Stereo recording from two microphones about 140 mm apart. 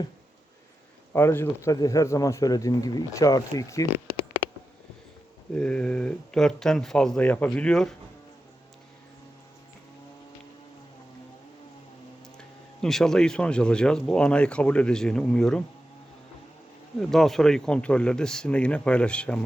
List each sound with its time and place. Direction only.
1.1 s speech: 15° left (ahead or behind)
5.5 s speech: 5° left (ahead or behind)
12.4 s speech: 5° left (ahead or behind)
17.0 s speech: centre (ahead or behind)